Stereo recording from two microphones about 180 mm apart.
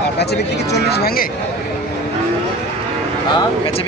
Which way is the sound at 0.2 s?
65° left (ahead or behind).